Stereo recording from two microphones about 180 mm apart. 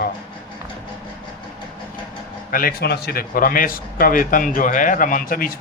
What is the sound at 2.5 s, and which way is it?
Speech, 50° left (ahead or behind).